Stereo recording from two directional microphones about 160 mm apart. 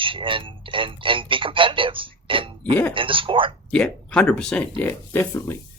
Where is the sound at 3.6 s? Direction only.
5° left (ahead or behind).